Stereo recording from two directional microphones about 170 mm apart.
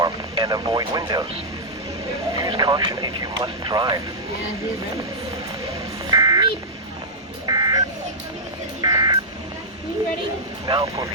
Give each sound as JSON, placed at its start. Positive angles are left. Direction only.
{"t": 0.0, "sound": "speech", "side_deg": -20}
{"t": 2.4, "sound": "speech", "side_deg": -25}
{"t": 6.1, "sound": "vehicle", "side_deg": -20}
{"t": 7.4, "sound": "a sound", "side_deg": -20}
{"t": 8.8, "sound": "telephone dialing", "side_deg": -20}
{"t": 10.7, "sound": "speech", "side_deg": -25}